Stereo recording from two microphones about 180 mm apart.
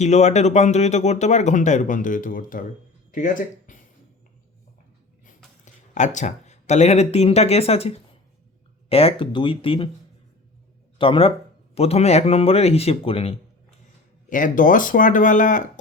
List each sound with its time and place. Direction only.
0.0 s speech: 40° left (ahead or behind)
5.6 s speech: 45° left (ahead or behind)
10.9 s speech: 30° left (ahead or behind)
14.3 s speech: 45° left (ahead or behind)